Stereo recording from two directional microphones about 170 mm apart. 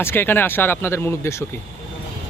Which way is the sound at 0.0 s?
15° left (ahead or behind).